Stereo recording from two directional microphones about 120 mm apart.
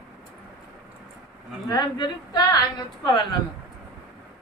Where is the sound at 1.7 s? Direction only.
35° left (ahead or behind).